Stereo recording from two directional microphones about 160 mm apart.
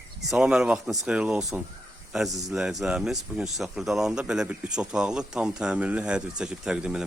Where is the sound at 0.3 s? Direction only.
5° right (ahead or behind).